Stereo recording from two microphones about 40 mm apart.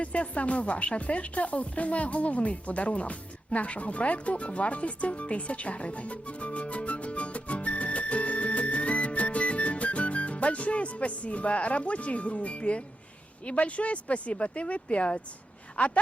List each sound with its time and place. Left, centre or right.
0.0 s speech: left
15.8 s speech: left